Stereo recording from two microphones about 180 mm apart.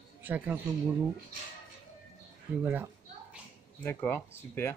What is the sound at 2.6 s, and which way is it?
Speech, 10° right (ahead or behind).